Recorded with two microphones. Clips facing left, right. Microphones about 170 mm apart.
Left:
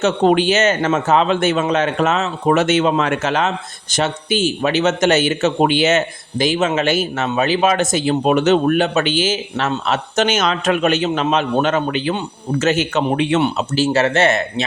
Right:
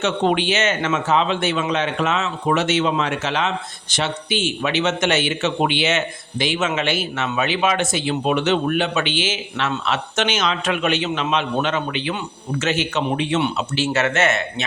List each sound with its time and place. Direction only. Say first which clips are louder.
0.0 s a man's voice: left 5 dB; 40° left (ahead or behind)
13.4 s a man's voice: left 4 dB; 40° left (ahead or behind)